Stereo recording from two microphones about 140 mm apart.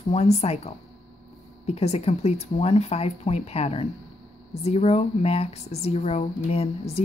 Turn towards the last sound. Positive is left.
turn(degrees=45)  # may be behind; listen again after turning